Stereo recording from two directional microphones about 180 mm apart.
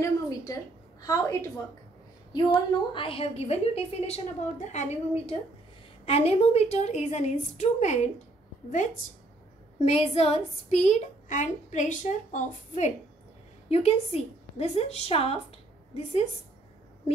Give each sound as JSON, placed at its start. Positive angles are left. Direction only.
{"t": 0.0, "sound": "a sound", "side_deg": 20}
{"t": 1.0, "sound": "a woman's voice", "side_deg": 20}
{"t": 9.8, "sound": "a woman's voice", "side_deg": 35}